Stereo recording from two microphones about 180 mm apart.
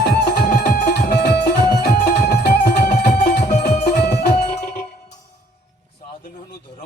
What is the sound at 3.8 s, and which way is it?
Music, 65° left (ahead or behind).